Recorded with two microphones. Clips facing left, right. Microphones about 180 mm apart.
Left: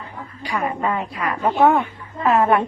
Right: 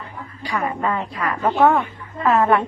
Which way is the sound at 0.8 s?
15° left (ahead or behind).